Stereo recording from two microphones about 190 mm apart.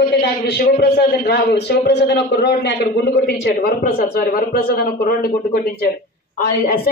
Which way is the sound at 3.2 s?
50° left (ahead or behind).